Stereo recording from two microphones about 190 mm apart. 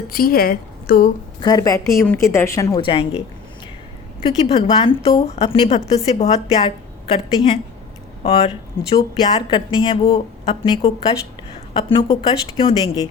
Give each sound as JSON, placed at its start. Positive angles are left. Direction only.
{"t": 0.1, "sound": "a woman's voice", "side_deg": 50}
{"t": 1.4, "sound": "a woman's voice", "side_deg": 20}